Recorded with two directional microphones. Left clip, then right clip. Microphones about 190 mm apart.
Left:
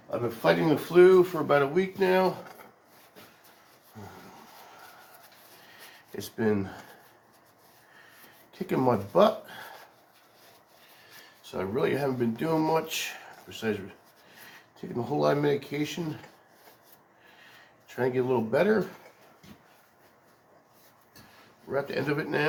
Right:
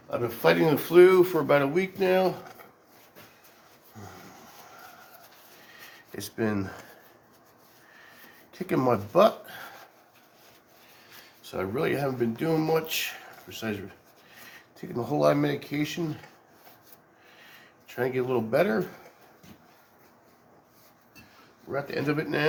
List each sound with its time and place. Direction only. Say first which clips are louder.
0.4 s speech: right 2 dB; 60° right (ahead or behind); by 2.5 s 45° right (ahead or behind)
6.1 s speech: left 2 dB; 45° right (ahead or behind)
8.5 s speech: right 1 dB; 45° right (ahead or behind)
11.5 s speech: even; 45° right (ahead or behind)
14.8 s speech: right 2 dB; 50° right (ahead or behind)
17.8 s speech: left 1 dB; 50° right (ahead or behind)
21.7 s speech: even; 40° right (ahead or behind)